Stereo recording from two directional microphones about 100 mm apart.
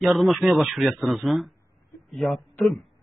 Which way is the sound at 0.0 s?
Centre (ahead or behind).